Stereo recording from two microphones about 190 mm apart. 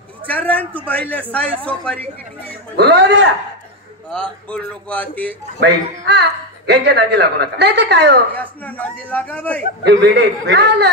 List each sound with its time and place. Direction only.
0.3 s speech: 10° left (ahead or behind)
2.8 s speech: 60° right (ahead or behind)
4.1 s speech: 5° left (ahead or behind)
5.6 s speech: 60° right (ahead or behind)
8.4 s speech: 10° left (ahead or behind)
9.8 s speech: 65° right (ahead or behind)